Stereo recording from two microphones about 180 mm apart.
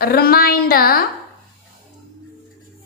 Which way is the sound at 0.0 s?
55° left (ahead or behind).